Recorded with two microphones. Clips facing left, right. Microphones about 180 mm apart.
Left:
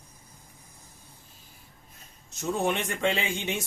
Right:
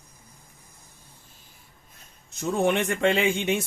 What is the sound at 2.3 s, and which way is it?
Speech, 55° right (ahead or behind).